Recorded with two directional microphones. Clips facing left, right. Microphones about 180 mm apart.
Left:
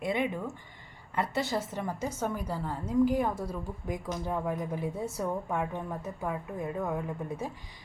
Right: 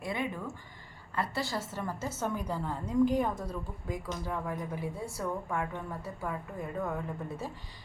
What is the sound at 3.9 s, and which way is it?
Speech, 20° left (ahead or behind).